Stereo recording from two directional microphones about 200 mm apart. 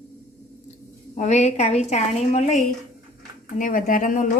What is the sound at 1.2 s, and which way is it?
A woman's voice, 35° left (ahead or behind).